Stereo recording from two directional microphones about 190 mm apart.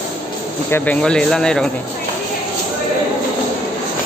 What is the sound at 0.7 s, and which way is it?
Speech, 10° left (ahead or behind).